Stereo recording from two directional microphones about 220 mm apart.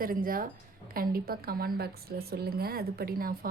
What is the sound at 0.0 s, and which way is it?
A woman's voice, 40° right (ahead or behind).